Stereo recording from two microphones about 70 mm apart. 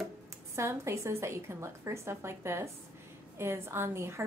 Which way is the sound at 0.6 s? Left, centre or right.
Right.